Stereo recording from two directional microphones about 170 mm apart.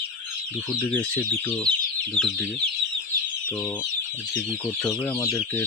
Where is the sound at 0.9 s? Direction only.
10° left (ahead or behind).